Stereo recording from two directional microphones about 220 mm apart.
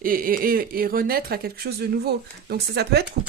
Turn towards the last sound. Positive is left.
turn(degrees=-50)  # may be behind; listen again after turning